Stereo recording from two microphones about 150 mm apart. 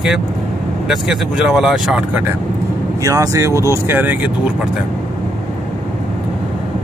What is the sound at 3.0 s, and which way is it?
Speech, 25° right (ahead or behind).